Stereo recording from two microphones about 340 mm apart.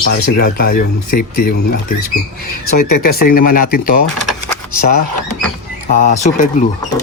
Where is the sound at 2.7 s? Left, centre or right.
Left.